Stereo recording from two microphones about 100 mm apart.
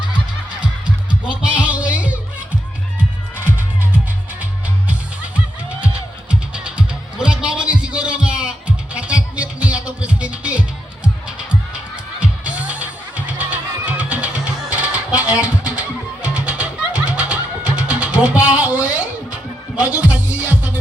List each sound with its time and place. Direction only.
0.6 s music: 10° right (ahead or behind)
6.5 s music: 10° right (ahead or behind)